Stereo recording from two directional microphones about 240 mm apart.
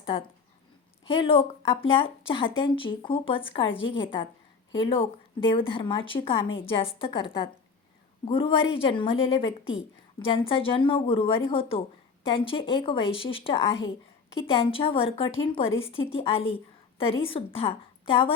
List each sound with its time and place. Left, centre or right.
0.0 s a woman's voice: left
9.6 s a woman's voice: left
10.2 s a woman's voice: left